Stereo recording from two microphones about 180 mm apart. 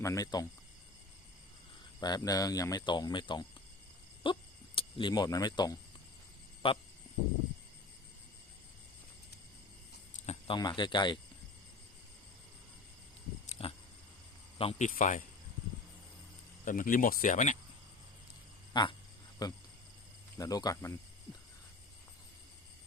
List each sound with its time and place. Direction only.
0.0 s speech: 20° left (ahead or behind)
2.0 s speech: 20° left (ahead or behind)
10.2 s speech: 30° left (ahead or behind)
13.6 s a sound: 35° left (ahead or behind)
14.6 s speech: 35° left (ahead or behind)
16.6 s speech: 50° left (ahead or behind)
18.7 s a sound: 25° left (ahead or behind)
19.4 s speech: 20° left (ahead or behind)